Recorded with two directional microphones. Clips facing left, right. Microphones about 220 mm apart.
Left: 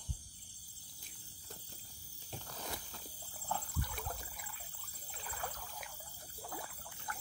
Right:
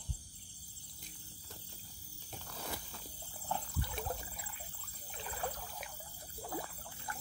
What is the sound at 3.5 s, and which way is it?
Trickle, 25° right (ahead or behind).